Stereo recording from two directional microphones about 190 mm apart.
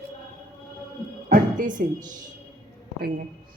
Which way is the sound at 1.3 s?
45° right (ahead or behind).